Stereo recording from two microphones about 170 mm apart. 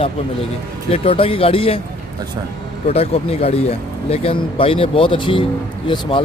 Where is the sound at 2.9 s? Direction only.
35° left (ahead or behind).